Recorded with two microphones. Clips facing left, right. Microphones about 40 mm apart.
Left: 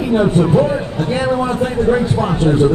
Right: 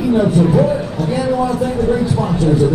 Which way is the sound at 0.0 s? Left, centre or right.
Left.